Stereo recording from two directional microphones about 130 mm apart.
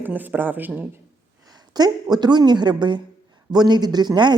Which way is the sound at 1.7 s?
30° right (ahead or behind).